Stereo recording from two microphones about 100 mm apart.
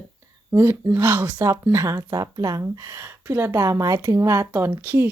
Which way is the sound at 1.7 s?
30° right (ahead or behind).